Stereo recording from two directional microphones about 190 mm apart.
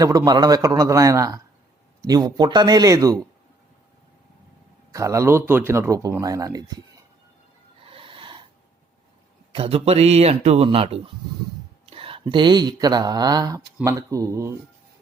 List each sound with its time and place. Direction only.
0.0 s a man's voice: 20° right (ahead or behind)
4.9 s speech: 15° right (ahead or behind)
7.9 s snort: 30° right (ahead or behind)
9.5 s speech: 30° right (ahead or behind)